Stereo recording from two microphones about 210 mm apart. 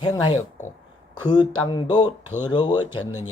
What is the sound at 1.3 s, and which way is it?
Speech, 20° left (ahead or behind).